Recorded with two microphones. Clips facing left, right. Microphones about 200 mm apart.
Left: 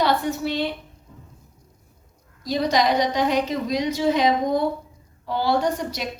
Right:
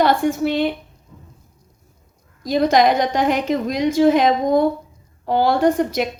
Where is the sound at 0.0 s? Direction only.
50° right (ahead or behind).